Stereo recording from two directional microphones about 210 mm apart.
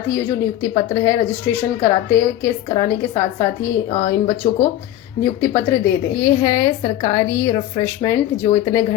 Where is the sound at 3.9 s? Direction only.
25° left (ahead or behind).